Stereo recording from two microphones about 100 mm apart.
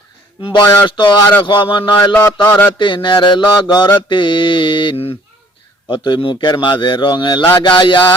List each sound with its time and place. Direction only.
0.4 s a man's voice: 55° left (ahead or behind)
0.9 s mantra: 55° left (ahead or behind)
2.1 s a sound: 25° left (ahead or behind)
2.7 s a man's voice: 55° left (ahead or behind)
4.1 s mantra: 55° left (ahead or behind)
5.9 s a man's voice: 50° left (ahead or behind)